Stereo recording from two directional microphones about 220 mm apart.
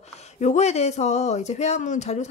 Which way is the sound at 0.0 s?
30° left (ahead or behind).